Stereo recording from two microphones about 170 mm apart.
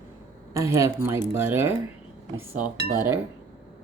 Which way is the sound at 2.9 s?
15° right (ahead or behind).